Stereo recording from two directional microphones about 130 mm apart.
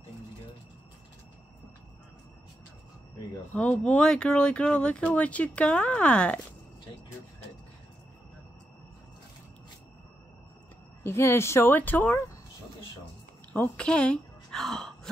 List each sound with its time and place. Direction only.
3.5 s speech: 10° left (ahead or behind)
11.1 s speech: 20° left (ahead or behind)
13.5 s a woman's voice: 10° left (ahead or behind)